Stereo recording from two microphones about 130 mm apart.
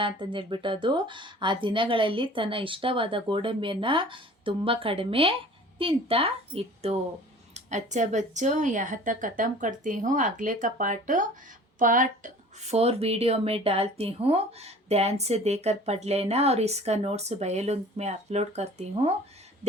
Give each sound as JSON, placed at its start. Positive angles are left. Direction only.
{"t": 0.0, "sound": "a woman's voice", "side_deg": -40}
{"t": 7.5, "sound": "a woman's voice", "side_deg": -65}
{"t": 12.7, "sound": "speech", "side_deg": -50}